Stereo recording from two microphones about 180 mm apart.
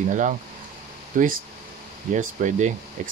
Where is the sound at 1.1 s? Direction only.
50° right (ahead or behind).